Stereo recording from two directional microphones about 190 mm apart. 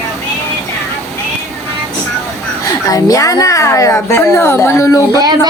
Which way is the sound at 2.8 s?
20° left (ahead or behind).